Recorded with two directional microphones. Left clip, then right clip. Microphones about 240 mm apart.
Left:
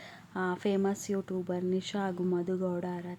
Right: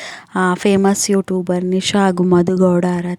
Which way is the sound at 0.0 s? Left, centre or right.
Right.